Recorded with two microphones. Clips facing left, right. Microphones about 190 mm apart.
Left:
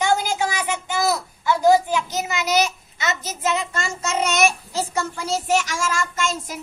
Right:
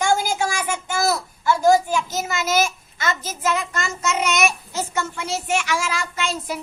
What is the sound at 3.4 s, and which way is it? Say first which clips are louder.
Child singing: even; 25° left (ahead or behind).